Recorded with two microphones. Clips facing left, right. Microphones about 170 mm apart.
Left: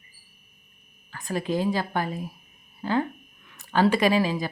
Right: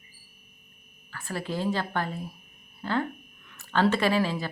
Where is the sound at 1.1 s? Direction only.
15° left (ahead or behind).